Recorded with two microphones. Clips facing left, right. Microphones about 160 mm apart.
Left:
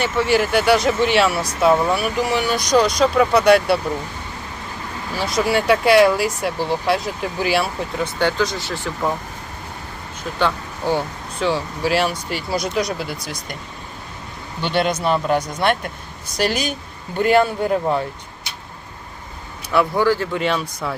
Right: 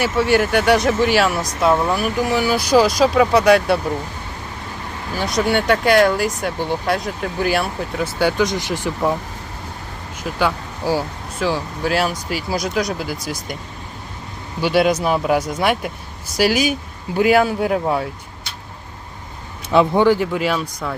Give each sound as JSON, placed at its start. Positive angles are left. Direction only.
{"t": 0.0, "sound": "speech", "side_deg": 0}
{"t": 5.1, "sound": "speech", "side_deg": 0}
{"t": 10.3, "sound": "speech", "side_deg": -5}
{"t": 14.6, "sound": "speech", "side_deg": -5}
{"t": 19.7, "sound": "speech", "side_deg": -20}
{"t": 20.3, "sound": "speech", "side_deg": -5}